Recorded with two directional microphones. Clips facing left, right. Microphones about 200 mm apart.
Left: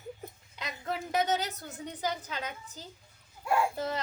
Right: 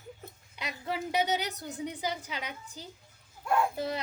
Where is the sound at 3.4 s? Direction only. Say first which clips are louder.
Even; 5° left (ahead or behind).